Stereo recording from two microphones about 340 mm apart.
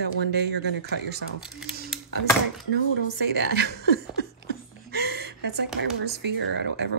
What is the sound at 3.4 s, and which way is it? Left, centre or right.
Speech, right.